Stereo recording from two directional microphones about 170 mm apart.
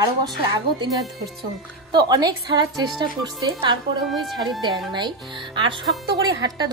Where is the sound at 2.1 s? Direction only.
25° right (ahead or behind).